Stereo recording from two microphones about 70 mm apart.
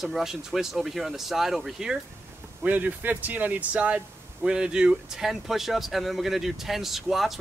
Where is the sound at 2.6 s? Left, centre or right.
Right.